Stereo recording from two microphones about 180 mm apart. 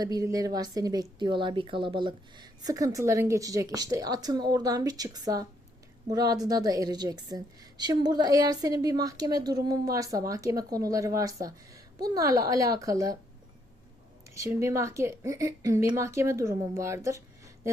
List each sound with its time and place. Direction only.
0.0 s a woman's voice: 20° right (ahead or behind)
14.3 s speech: 15° right (ahead or behind)